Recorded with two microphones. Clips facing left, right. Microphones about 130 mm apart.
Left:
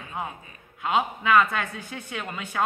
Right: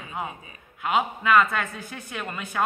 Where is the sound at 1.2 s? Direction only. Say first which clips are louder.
Right 1 dB; 15° left (ahead or behind).